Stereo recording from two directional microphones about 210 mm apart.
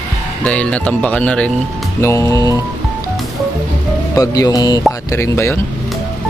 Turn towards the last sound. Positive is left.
turn(degrees=15)  # may be behind; listen again after turning